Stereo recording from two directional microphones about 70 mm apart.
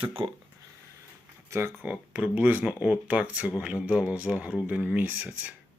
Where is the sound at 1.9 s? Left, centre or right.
Right.